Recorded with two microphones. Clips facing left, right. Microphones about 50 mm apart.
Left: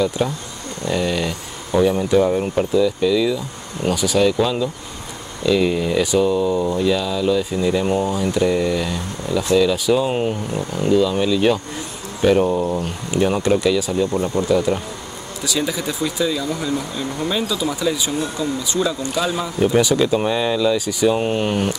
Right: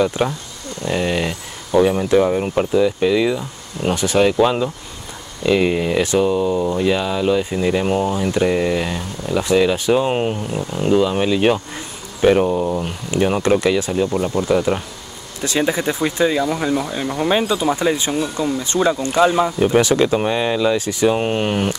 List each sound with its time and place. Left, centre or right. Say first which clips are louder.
0.0 s speech: right 2 dB; right
6.5 s speech: right 1 dB; centre
6.8 s speech: right 1 dB; right
12.4 s speech: right 1 dB; centre